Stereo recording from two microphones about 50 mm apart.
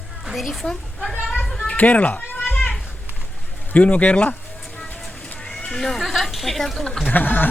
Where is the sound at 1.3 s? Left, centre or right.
Centre.